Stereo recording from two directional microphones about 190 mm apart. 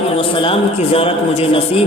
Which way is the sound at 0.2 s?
30° left (ahead or behind).